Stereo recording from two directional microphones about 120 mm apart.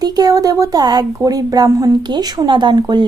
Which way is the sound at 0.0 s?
30° right (ahead or behind).